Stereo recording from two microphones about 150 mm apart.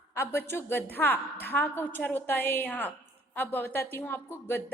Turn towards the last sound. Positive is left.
turn(degrees=15)  # may be behind; listen again after turning